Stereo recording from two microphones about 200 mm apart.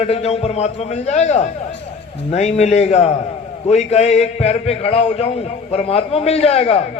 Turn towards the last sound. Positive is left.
turn(degrees=30)  # may be behind; listen again after turning